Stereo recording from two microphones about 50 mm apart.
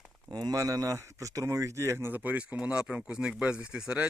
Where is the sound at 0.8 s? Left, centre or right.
Right.